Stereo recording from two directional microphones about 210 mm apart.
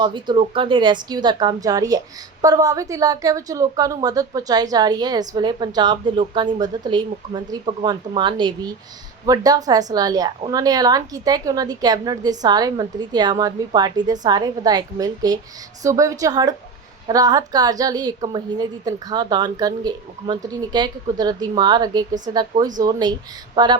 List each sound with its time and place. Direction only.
0.0 s a woman's voice: 20° right (ahead or behind)